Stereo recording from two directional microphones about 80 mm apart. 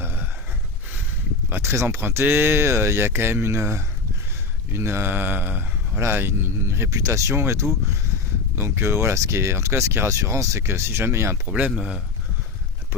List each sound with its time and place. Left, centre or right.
0.0 s a sound: right
1.5 s speech: right
4.7 s mantra: right
6.0 s speech: right
11.4 s speech: centre
11.7 s speech: centre